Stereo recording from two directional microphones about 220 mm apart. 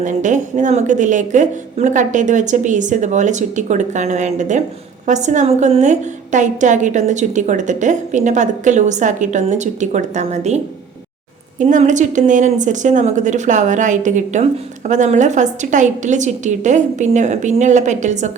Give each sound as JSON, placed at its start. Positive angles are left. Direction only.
{"t": 0.0, "sound": "a woman's voice", "side_deg": -35}
{"t": 11.6, "sound": "a woman's voice", "side_deg": -35}